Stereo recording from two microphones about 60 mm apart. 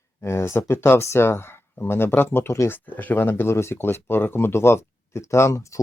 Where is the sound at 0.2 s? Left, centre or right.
Left.